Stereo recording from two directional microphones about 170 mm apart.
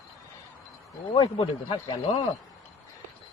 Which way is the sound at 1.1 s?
25° left (ahead or behind).